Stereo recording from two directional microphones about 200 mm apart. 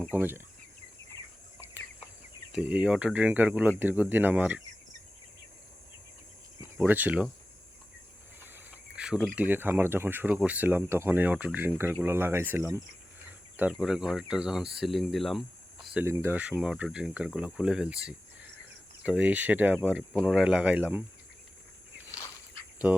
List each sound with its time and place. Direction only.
0.2 s speech: 10° right (ahead or behind)
1.1 s bird: 15° left (ahead or behind)
2.5 s speech: 5° right (ahead or behind)
6.7 s speech: 10° right (ahead or behind)
8.4 s speech: 10° right (ahead or behind)
16.0 s speech: 10° right (ahead or behind)
19.0 s speech: 5° right (ahead or behind)
22.8 s speech: 5° right (ahead or behind)